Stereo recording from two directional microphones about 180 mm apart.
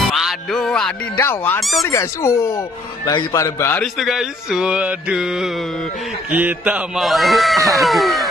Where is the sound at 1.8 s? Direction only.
15° left (ahead or behind).